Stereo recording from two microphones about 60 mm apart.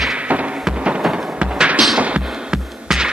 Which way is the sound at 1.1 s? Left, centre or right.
Centre.